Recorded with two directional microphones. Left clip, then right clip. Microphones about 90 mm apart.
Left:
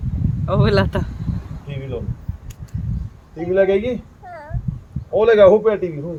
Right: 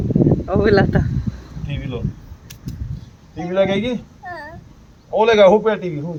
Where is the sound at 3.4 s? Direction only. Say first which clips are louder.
Left 2 dB; 35° left (ahead or behind).